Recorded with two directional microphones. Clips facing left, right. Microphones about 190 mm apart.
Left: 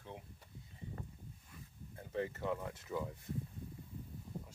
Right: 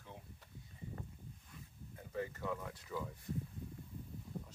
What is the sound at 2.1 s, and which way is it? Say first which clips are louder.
Speech: left 3 dB; 25° left (ahead or behind).